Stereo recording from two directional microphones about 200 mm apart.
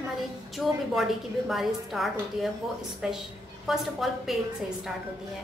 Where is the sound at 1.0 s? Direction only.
Centre (ahead or behind).